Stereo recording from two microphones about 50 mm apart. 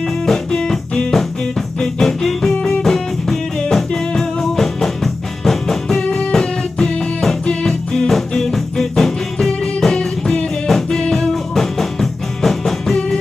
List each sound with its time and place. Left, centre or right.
0.3 s music: centre